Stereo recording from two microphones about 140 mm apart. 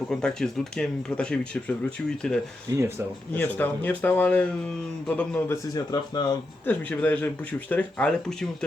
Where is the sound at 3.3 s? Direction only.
15° left (ahead or behind); by 6.4 s 30° left (ahead or behind).